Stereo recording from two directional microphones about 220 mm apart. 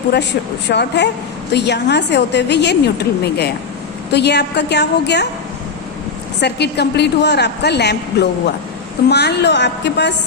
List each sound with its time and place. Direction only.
0.7 s a woman's voice: 50° left (ahead or behind)
6.4 s a woman's voice: 50° left (ahead or behind)